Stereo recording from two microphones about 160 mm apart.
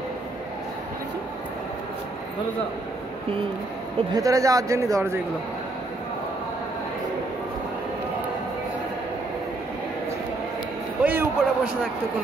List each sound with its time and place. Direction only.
4.1 s speech: 20° right (ahead or behind)
11.1 s a man's voice: 10° right (ahead or behind)